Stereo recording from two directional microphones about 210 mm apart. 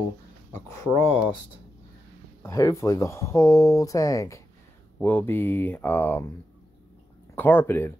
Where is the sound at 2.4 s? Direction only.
15° left (ahead or behind).